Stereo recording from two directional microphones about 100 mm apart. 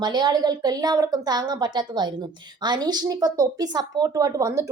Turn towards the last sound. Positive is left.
turn(degrees=-35)  # may be behind; listen again after turning